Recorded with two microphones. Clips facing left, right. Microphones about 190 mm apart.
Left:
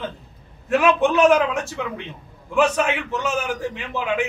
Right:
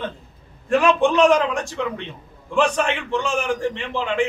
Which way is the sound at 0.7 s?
5° left (ahead or behind).